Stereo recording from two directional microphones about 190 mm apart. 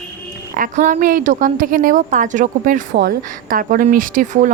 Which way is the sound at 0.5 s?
45° right (ahead or behind).